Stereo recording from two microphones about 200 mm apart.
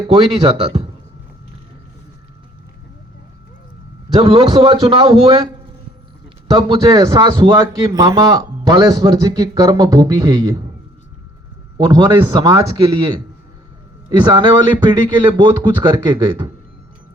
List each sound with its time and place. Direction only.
0.3 s speech: 30° right (ahead or behind)
4.2 s speech: 30° right (ahead or behind)
6.5 s a man's voice: 20° right (ahead or behind)
11.8 s speech: 25° right (ahead or behind)